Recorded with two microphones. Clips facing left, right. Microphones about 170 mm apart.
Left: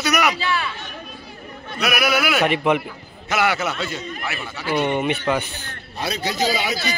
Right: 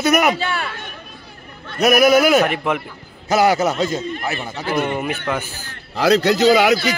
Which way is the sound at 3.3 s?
35° right (ahead or behind).